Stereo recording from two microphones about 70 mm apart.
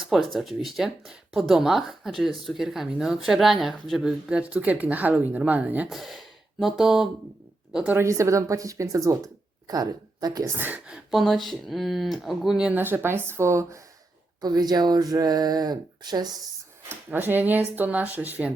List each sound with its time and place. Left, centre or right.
0.0 s speech: centre
4.3 s speech: centre
5.9 s a woman's voice: centre
8.0 s speech: right
10.4 s a woman's voice: right
10.8 s speech: centre
12.7 s a woman's voice: right
14.4 s speech: right
17.1 s speech: right